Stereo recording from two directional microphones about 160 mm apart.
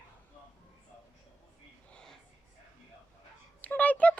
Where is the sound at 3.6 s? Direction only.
10° left (ahead or behind).